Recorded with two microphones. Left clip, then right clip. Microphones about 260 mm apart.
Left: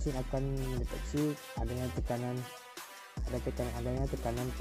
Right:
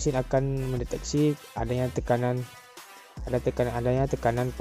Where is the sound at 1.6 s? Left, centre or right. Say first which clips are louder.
Right 10 dB; right.